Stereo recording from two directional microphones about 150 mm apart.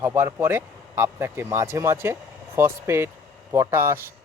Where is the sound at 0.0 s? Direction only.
20° right (ahead or behind).